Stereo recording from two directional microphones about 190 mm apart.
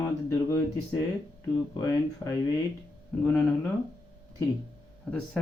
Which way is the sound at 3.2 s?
10° left (ahead or behind).